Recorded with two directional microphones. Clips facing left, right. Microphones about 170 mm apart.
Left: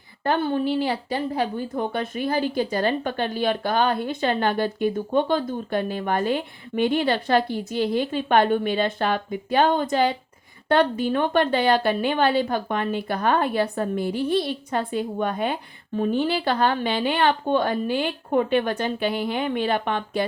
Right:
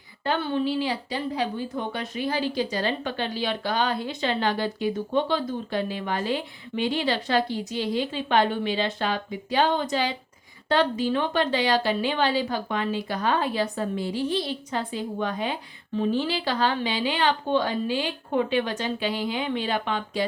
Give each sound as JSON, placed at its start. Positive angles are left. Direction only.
{"t": 0.3, "sound": "a woman's voice", "side_deg": 50}